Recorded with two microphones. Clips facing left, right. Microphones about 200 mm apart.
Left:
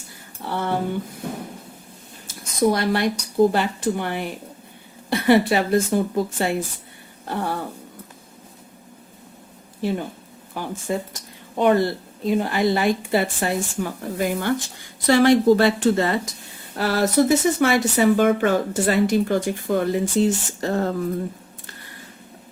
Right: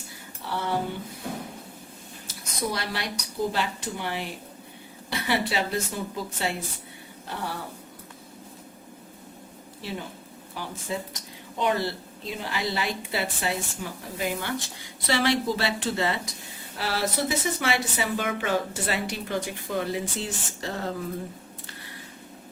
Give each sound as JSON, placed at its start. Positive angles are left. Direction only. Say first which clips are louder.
{"t": 0.4, "sound": "a sound", "louder": "left 4 dB", "side_deg": 55}
{"t": 2.2, "sound": "speech", "louder": "left 12 dB", "side_deg": 50}
{"t": 10.5, "sound": "speech", "louder": "left 7 dB", "side_deg": 50}